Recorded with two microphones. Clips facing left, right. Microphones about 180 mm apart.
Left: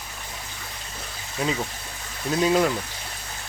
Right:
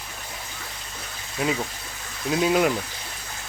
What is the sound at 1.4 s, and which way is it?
Speech, 5° right (ahead or behind).